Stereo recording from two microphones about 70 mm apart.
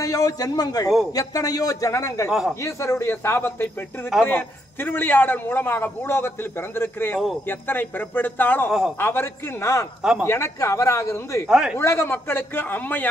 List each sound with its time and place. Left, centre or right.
0.0 s a man's voice: left
2.6 s a man's voice: left
11.4 s speech: centre
11.8 s a man's voice: left